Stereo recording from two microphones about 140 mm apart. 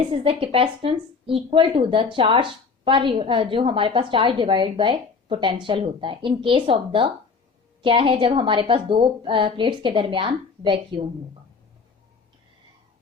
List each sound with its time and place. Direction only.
0.1 s a woman's voice: 40° right (ahead or behind)